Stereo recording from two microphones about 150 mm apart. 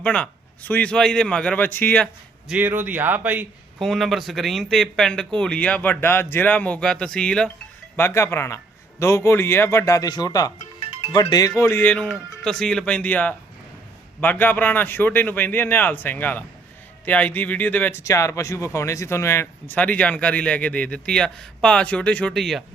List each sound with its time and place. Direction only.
0.0 s speech: 10° left (ahead or behind)
2.5 s speech: 10° right (ahead or behind)
3.8 s a man's voice: centre (ahead or behind)